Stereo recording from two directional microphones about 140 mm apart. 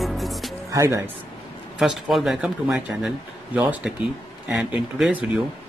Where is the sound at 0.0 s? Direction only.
Centre (ahead or behind).